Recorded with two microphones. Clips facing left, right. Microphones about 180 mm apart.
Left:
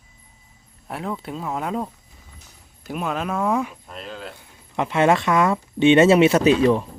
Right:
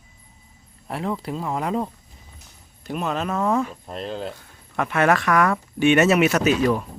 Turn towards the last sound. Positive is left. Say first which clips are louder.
# left 3 dB
turn(degrees=25)  # may be behind; listen again after turning